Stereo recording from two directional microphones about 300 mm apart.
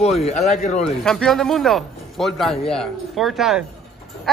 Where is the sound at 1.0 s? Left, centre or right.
Centre.